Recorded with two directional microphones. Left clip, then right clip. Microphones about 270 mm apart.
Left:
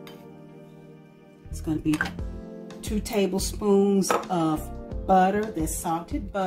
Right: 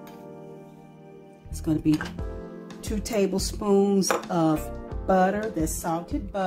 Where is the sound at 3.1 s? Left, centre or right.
Right.